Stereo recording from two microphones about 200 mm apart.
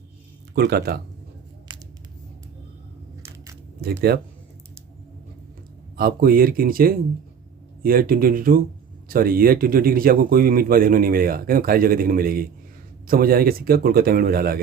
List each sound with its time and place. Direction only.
0.5 s speech: 55° right (ahead or behind)
1.7 s scissors: 20° right (ahead or behind)
3.8 s a sound: 50° right (ahead or behind)
6.0 s speech: 45° right (ahead or behind)